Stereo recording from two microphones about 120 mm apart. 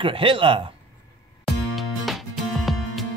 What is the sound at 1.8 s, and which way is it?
Music, centre (ahead or behind).